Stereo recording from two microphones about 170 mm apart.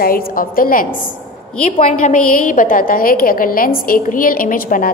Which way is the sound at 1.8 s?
45° left (ahead or behind).